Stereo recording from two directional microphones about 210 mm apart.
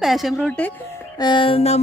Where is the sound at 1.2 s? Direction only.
25° left (ahead or behind).